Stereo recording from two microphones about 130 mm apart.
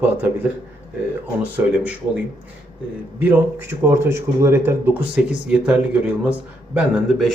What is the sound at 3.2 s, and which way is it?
Speech, 20° right (ahead or behind).